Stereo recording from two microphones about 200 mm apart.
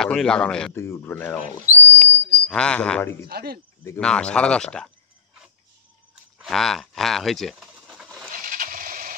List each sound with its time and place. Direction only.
0.0 s a man's voice: 5° left (ahead or behind)
1.7 s a sound: 35° right (ahead or behind)
2.4 s a man's voice: 5° left (ahead or behind)
3.3 s speech: 50° right (ahead or behind)
3.8 s speech: 5° left (ahead or behind)
6.3 s pigeon: centre (ahead or behind)
8.3 s coin: 45° right (ahead or behind)